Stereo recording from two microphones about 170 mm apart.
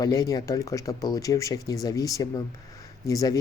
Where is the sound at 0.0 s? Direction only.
20° left (ahead or behind).